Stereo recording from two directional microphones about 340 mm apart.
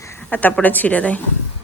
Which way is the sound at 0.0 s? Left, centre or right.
Centre.